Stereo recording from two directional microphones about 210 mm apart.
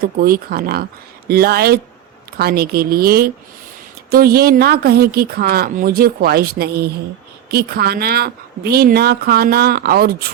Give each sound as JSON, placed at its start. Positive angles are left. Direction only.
{"t": 0.0, "sound": "a woman's voice", "side_deg": -45}